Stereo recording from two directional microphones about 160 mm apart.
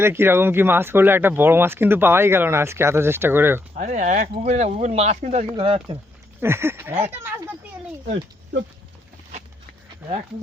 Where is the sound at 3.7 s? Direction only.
50° right (ahead or behind).